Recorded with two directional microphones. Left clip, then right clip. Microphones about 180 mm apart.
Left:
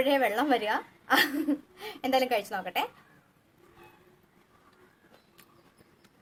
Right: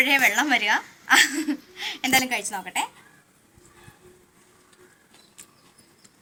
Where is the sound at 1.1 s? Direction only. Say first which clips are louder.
Right 6 dB; 15° left (ahead or behind).